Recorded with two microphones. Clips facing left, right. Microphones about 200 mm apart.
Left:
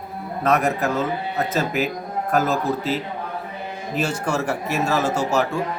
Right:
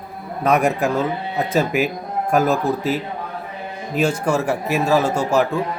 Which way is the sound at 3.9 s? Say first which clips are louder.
Right 5 dB; 10° right (ahead or behind).